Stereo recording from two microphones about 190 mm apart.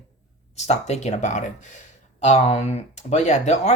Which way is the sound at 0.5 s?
35° left (ahead or behind).